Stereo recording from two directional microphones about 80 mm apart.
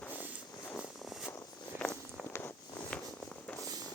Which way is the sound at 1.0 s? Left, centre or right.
Centre.